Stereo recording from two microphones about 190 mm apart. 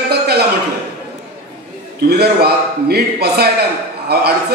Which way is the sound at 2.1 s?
55° right (ahead or behind).